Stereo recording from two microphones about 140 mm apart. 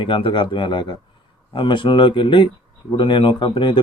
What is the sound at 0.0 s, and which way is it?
Speech, 40° left (ahead or behind).